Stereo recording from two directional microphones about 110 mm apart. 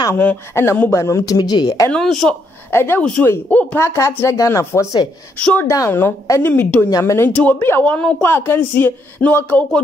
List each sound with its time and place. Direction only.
0.2 s speech: 20° left (ahead or behind); by 1.9 s 40° left (ahead or behind)
1.9 s a woman's voice: 5° left (ahead or behind)
2.7 s speech: 20° left (ahead or behind)
5.4 s a woman's voice: 10° left (ahead or behind)
5.7 s speech: 25° left (ahead or behind)
6.9 s speech: 30° left (ahead or behind)
7.2 s a woman's voice: 15° left (ahead or behind)